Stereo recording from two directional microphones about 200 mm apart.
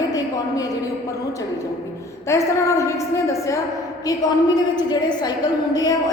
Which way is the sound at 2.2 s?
15° left (ahead or behind).